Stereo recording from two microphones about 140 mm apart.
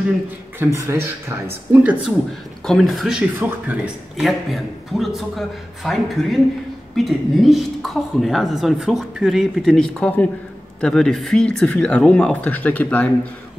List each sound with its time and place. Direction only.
0.6 s speech: 20° right (ahead or behind)
2.6 s speech: centre (ahead or behind)
3.3 s speech: 15° right (ahead or behind)
7.1 s speech: centre (ahead or behind)